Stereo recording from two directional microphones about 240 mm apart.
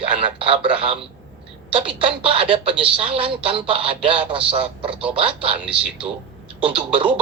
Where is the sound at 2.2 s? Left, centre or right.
Right.